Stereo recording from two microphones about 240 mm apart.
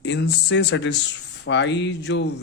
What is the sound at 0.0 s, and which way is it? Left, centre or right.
Speech, left.